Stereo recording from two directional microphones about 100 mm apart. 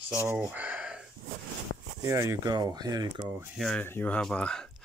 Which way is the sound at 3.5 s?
5° left (ahead or behind).